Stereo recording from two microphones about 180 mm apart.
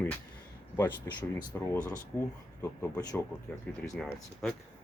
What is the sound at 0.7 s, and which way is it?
Speech, 20° left (ahead or behind).